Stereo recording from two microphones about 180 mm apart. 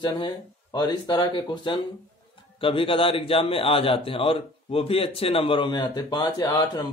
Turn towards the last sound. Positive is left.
turn(degrees=20)  # may be behind; listen again after turning